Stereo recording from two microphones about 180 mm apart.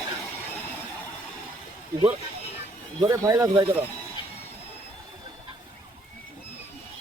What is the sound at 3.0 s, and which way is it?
Speech, 20° right (ahead or behind).